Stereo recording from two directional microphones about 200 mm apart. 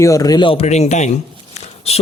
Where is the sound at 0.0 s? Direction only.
15° left (ahead or behind).